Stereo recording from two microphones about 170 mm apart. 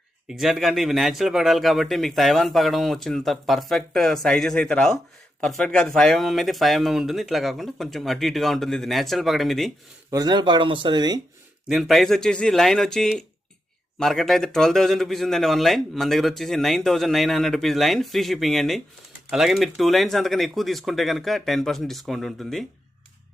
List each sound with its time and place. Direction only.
0.3 s speech: centre (ahead or behind)
10.1 s speech: 25° right (ahead or behind)
11.7 s speech: centre (ahead or behind)